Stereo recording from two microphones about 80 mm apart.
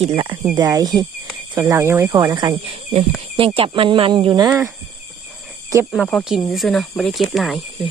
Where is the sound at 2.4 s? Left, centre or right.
Right.